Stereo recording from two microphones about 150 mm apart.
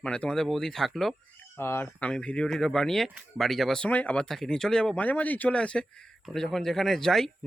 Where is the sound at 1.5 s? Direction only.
15° left (ahead or behind).